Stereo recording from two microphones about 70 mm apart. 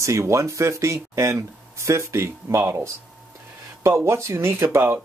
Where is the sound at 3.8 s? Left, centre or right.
Right.